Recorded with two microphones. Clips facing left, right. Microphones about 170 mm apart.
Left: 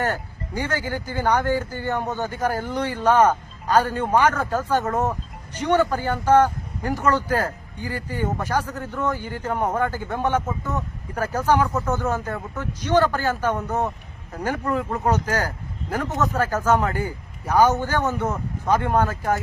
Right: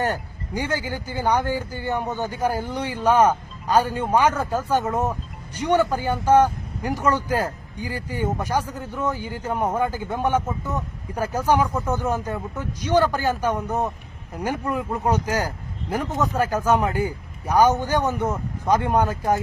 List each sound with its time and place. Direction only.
0.0 s speech: 15° right (ahead or behind)